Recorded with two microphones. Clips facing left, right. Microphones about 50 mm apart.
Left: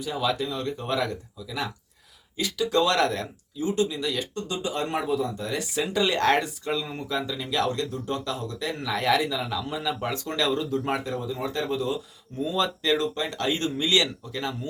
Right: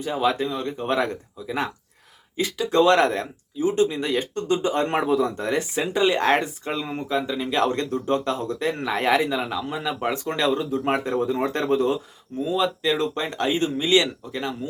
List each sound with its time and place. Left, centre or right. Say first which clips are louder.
0.0 s a man's voice: right 4 dB; right
7.6 s a man's voice: right 4 dB; right
12.5 s speech: right 2 dB; centre
13.0 s speech: right 3 dB; right